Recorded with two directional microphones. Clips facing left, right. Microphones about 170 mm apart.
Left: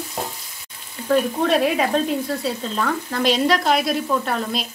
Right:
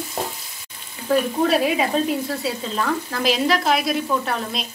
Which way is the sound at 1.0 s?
5° right (ahead or behind).